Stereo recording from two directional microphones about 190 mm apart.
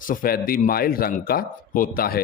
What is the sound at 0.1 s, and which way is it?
A man's voice, 50° left (ahead or behind).